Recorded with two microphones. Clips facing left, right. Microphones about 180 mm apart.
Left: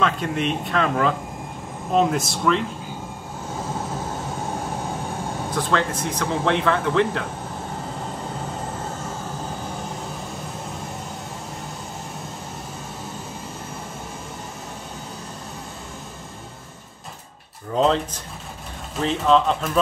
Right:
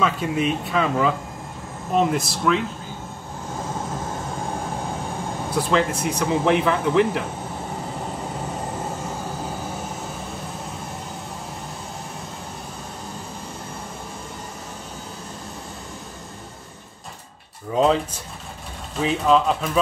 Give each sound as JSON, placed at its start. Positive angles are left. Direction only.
{"t": 0.0, "sound": "speech", "side_deg": -5}
{"t": 5.5, "sound": "speech", "side_deg": -10}
{"t": 17.7, "sound": "speech", "side_deg": -5}